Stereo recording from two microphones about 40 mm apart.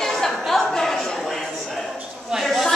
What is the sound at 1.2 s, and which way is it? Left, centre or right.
A man's voice, centre.